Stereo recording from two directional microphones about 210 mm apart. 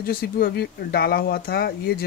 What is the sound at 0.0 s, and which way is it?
Speech, 45° left (ahead or behind).